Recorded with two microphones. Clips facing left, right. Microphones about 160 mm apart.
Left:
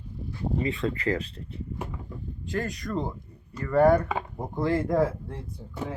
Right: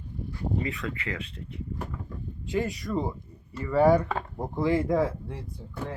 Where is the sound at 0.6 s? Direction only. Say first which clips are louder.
Left 5 dB; 30° left (ahead or behind).